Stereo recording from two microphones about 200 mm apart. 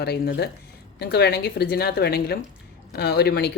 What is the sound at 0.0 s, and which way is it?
Speech, 55° left (ahead or behind).